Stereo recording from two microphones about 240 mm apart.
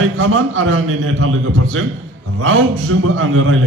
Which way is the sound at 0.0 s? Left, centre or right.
Right.